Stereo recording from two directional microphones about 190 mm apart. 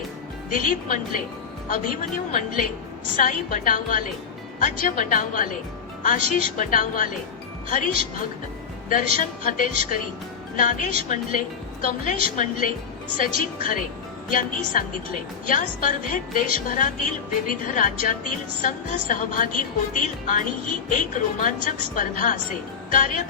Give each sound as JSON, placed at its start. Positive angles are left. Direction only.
{"t": 0.5, "sound": "a woman's voice", "side_deg": 45}
{"t": 8.9, "sound": "a woman's voice", "side_deg": 45}